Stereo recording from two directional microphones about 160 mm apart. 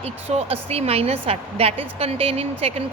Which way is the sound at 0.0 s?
40° right (ahead or behind).